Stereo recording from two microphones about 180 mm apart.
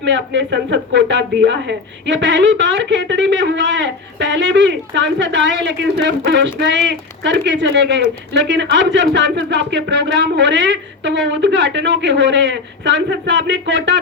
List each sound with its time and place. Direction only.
0.0 s a woman's voice: 85° right